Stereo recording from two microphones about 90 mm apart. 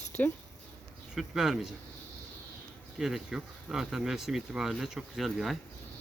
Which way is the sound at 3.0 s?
5° right (ahead or behind).